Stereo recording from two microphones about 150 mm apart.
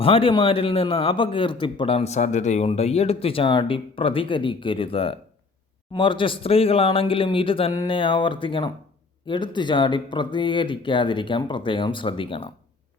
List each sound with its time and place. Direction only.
0.0 s speech: 35° left (ahead or behind)